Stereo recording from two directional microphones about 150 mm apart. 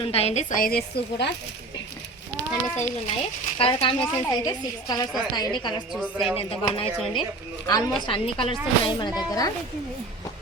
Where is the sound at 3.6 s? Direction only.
35° left (ahead or behind).